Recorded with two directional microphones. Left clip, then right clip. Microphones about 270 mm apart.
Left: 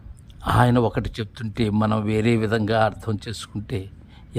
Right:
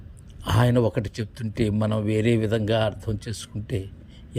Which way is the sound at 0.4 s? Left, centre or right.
Centre.